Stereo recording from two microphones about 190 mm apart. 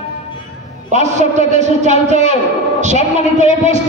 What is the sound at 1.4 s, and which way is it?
A man's voice, 40° right (ahead or behind).